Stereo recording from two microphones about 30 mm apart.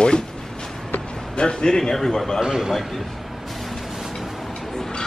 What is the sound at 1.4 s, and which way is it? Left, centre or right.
Speech, left.